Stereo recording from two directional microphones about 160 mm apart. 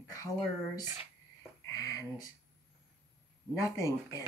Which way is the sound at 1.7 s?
20° left (ahead or behind).